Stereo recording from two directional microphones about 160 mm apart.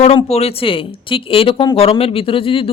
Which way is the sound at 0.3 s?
40° left (ahead or behind).